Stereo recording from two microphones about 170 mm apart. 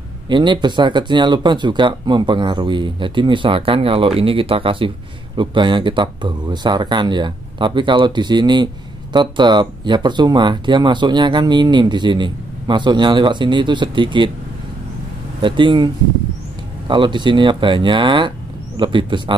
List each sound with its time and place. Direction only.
0.3 s speech: 25° right (ahead or behind)
15.4 s speech: 30° right (ahead or behind)